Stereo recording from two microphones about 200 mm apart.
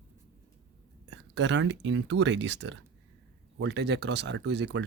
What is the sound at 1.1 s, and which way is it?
Speech, 60° right (ahead or behind).